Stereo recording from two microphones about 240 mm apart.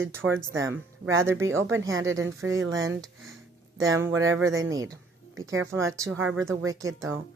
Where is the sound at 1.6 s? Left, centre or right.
Right.